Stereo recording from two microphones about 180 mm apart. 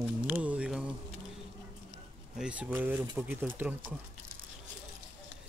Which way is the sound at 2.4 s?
5° right (ahead or behind).